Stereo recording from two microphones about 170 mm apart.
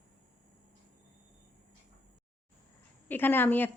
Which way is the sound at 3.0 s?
10° left (ahead or behind).